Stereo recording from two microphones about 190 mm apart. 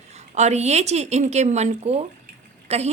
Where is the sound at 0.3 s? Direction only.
35° right (ahead or behind).